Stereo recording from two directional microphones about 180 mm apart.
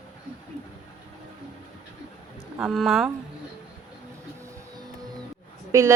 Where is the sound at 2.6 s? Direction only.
Centre (ahead or behind).